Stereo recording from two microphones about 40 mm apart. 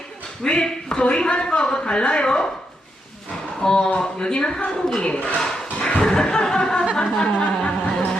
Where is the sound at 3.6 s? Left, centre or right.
Centre.